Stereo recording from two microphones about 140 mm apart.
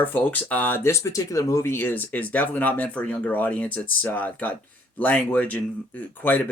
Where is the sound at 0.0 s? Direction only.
10° left (ahead or behind).